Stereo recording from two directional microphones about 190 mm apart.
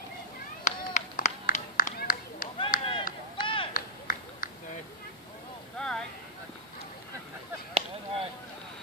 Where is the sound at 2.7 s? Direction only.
45° left (ahead or behind).